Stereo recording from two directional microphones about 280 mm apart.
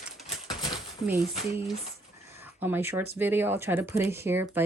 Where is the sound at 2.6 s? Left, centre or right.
Centre.